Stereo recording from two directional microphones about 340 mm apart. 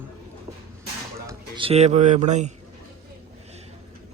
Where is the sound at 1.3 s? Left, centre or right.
Centre.